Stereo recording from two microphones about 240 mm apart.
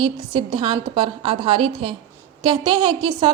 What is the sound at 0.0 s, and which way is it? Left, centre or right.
A woman's voice, right.